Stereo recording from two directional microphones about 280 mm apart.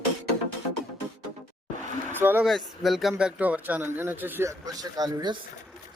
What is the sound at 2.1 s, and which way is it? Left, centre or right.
Speech, centre.